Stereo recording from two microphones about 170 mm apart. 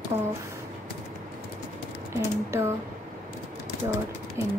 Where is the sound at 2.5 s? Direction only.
15° right (ahead or behind).